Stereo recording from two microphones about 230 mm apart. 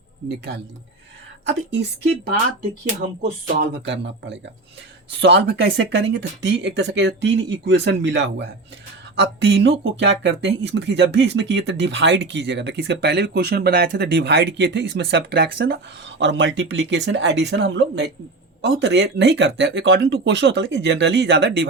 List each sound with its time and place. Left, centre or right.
3.4 s speech: right
3.9 s speech: right